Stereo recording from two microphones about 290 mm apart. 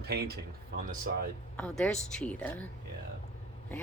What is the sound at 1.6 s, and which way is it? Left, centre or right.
Speech, centre.